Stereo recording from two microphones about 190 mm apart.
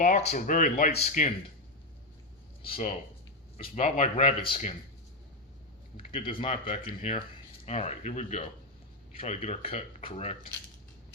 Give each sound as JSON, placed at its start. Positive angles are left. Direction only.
{"t": 0.0, "sound": "speech", "side_deg": 35}
{"t": 3.6, "sound": "speech", "side_deg": 35}
{"t": 6.0, "sound": "speech", "side_deg": 30}